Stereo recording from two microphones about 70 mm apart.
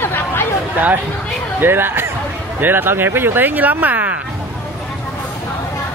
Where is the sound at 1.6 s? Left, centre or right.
Right.